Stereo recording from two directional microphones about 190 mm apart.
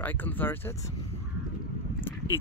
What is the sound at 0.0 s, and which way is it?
Speech, 10° left (ahead or behind).